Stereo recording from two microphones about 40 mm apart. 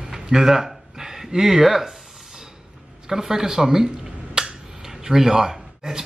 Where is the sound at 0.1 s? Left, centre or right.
Centre.